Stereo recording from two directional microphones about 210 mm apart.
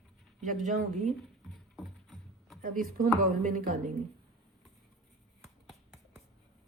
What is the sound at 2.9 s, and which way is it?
A woman's voice, 40° right (ahead or behind).